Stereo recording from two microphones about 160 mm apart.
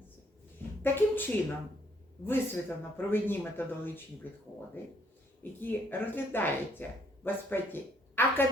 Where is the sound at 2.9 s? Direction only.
15° left (ahead or behind).